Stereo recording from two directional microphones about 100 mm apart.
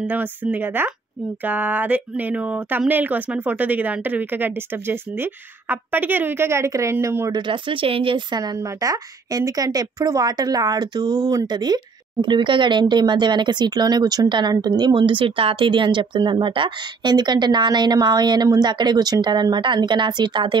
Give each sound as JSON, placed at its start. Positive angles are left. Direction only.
{"t": 0.0, "sound": "speech", "side_deg": -15}
{"t": 7.3, "sound": "speech", "side_deg": -55}
{"t": 8.4, "sound": "a woman's voice", "side_deg": -35}